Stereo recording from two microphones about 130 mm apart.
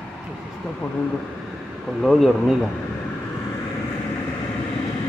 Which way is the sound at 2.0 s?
Centre (ahead or behind).